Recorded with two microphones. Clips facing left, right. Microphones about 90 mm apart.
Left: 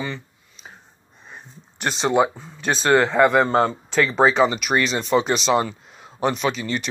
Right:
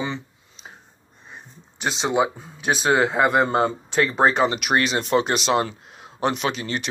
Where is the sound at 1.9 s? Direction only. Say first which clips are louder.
Left 2 dB; 5° right (ahead or behind).